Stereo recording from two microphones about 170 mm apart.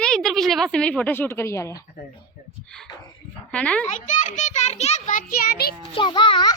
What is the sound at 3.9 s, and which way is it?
A child's voice, 45° left (ahead or behind).